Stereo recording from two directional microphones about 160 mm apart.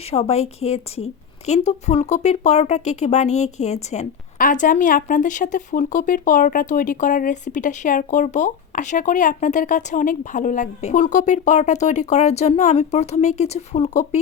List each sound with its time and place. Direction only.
0.1 s a woman's voice: 40° left (ahead or behind)